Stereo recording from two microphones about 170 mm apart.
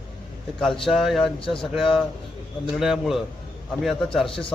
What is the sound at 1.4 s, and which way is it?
Speech, 30° left (ahead or behind).